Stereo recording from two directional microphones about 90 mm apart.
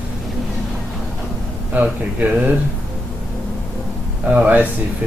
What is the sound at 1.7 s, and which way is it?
Speech, 15° right (ahead or behind).